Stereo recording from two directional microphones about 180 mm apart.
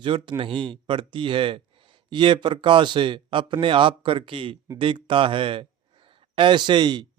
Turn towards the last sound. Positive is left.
turn(degrees=-25)  # may be behind; listen again after turning